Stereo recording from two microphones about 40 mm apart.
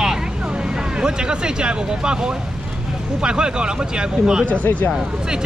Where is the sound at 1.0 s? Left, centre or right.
Right.